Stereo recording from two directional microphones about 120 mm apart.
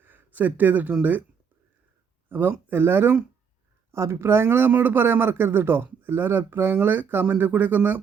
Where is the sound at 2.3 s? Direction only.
15° right (ahead or behind).